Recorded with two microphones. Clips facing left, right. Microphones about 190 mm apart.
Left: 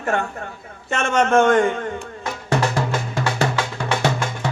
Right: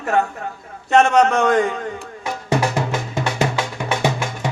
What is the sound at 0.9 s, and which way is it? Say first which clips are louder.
Speech: right 5 dB; 35° right (ahead or behind).